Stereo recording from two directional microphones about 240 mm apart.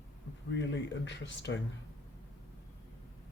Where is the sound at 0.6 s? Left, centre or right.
Left.